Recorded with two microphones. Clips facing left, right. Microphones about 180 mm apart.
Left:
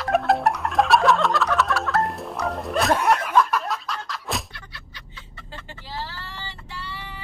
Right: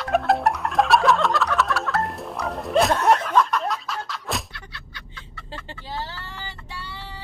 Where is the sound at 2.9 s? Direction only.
10° left (ahead or behind).